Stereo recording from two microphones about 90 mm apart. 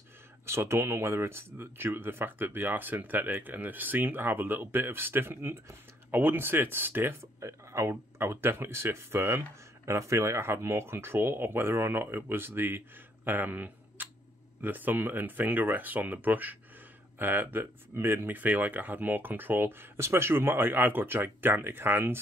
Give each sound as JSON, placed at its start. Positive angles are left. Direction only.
{"t": 0.5, "sound": "speech", "side_deg": -30}